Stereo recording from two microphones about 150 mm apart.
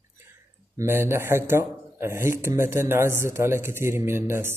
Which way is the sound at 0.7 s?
15° right (ahead or behind).